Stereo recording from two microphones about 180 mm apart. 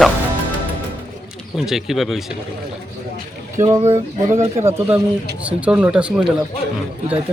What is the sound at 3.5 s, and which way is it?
Speech, 15° right (ahead or behind).